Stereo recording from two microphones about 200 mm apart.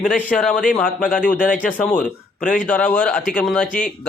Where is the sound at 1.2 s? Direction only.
45° left (ahead or behind).